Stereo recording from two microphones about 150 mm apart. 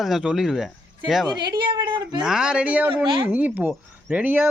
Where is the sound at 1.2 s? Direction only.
30° right (ahead or behind).